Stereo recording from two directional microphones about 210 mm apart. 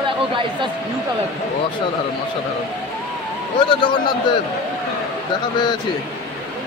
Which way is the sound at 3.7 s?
25° left (ahead or behind).